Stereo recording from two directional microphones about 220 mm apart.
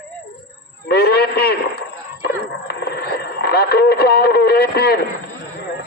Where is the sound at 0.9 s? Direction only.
45° left (ahead or behind).